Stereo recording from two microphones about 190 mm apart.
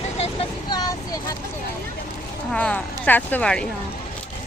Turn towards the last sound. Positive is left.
turn(degrees=5)  # may be behind; listen again after turning